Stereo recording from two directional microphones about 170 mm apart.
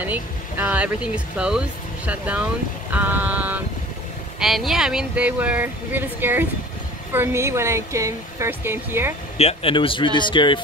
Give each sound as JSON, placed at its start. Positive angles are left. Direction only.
{"t": 0.0, "sound": "speech", "side_deg": -10}
{"t": 2.9, "sound": "a sound", "side_deg": -10}
{"t": 4.4, "sound": "speech", "side_deg": 0}
{"t": 9.4, "sound": "speech", "side_deg": 35}